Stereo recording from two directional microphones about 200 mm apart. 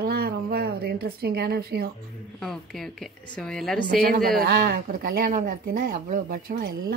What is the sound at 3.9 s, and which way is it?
Speech, 45° right (ahead or behind).